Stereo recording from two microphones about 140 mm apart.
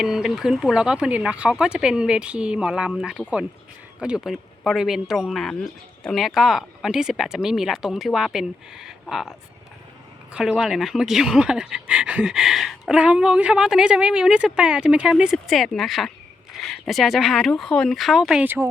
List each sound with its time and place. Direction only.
0.0 s speech: 5° right (ahead or behind)
10.3 s speech: 5° right (ahead or behind)
18.4 s speech: 15° right (ahead or behind)